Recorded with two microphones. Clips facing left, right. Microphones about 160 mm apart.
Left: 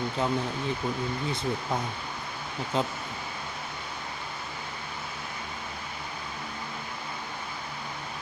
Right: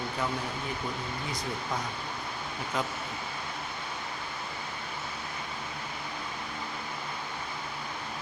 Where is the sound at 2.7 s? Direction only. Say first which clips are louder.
Left 4 dB; 25° left (ahead or behind).